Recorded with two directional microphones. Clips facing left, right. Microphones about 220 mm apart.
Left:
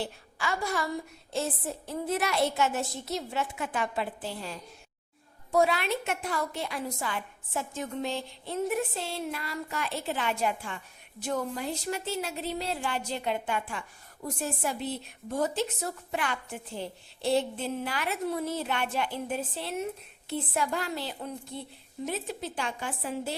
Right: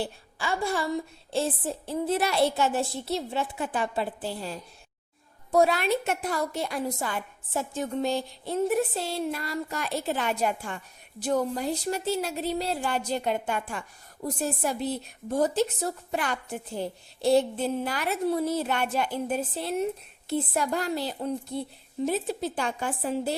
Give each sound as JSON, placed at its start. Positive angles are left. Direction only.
{"t": 0.0, "sound": "a woman's voice", "side_deg": -30}